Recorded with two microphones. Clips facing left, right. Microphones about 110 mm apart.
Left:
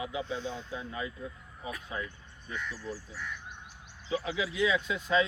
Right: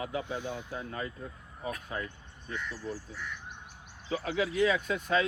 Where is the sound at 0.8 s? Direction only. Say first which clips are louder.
Even; 45° right (ahead or behind).